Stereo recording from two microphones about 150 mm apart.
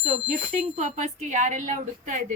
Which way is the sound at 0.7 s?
50° right (ahead or behind).